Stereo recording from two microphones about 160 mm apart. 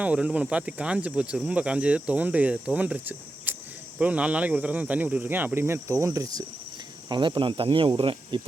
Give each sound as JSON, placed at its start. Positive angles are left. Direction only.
{"t": 0.0, "sound": "speech", "side_deg": -5}